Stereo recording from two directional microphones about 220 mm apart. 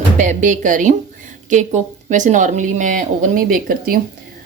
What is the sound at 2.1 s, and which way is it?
A woman's voice, 35° right (ahead or behind).